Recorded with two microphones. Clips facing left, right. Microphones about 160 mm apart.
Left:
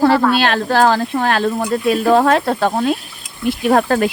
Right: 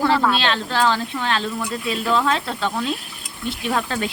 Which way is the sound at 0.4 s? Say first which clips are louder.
Left 6 dB; 50° left (ahead or behind).